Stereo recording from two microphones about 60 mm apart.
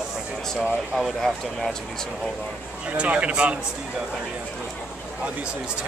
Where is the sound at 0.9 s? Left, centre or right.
Centre.